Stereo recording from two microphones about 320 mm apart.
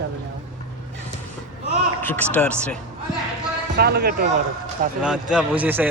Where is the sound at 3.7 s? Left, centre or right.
Right.